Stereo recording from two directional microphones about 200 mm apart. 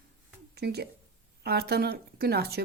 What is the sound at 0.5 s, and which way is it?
Speech, 55° right (ahead or behind).